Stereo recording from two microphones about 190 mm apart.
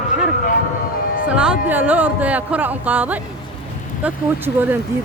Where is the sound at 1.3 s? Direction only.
5° right (ahead or behind).